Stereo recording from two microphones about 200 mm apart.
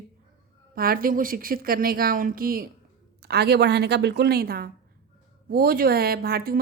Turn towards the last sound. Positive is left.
turn(degrees=-50)  # may be behind; listen again after turning